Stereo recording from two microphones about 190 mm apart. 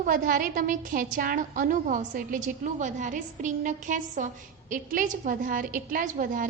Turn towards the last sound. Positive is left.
turn(degrees=-45)  # may be behind; listen again after turning